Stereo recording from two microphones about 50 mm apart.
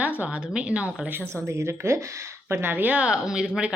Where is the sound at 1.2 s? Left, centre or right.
Right.